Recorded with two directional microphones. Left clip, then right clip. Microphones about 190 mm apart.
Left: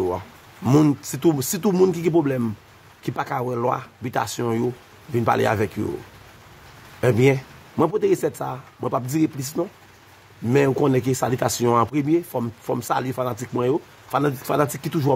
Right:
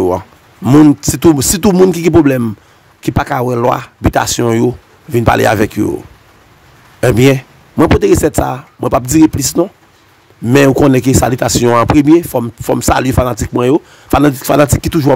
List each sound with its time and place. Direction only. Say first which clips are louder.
0.7 s speech: right 12 dB; 35° right (ahead or behind)
7.0 s speech: right 9 dB; 40° right (ahead or behind)